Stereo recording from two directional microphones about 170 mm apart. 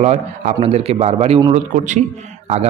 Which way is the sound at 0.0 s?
40° right (ahead or behind).